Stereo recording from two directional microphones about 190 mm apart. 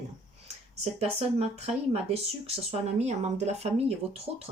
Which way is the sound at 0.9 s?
35° right (ahead or behind).